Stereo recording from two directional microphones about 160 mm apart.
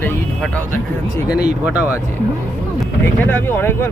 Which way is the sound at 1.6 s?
10° right (ahead or behind).